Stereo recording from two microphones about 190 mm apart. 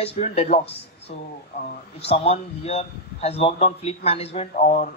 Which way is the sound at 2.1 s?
35° left (ahead or behind).